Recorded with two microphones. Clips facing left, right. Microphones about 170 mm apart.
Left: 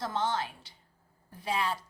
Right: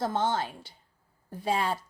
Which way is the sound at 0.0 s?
50° right (ahead or behind).